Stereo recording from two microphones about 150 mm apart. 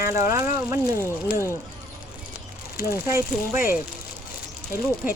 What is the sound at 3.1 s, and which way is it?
Speech, 15° right (ahead or behind).